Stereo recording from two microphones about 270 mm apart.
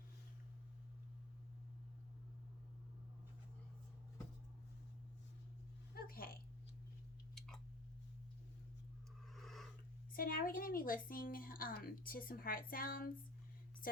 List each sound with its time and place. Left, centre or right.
5.9 s speech: left
7.3 s chewing: centre
9.3 s a sound: centre
10.1 s a woman's voice: left